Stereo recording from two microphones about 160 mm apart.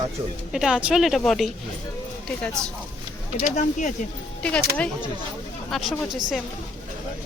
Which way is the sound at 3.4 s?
50° left (ahead or behind).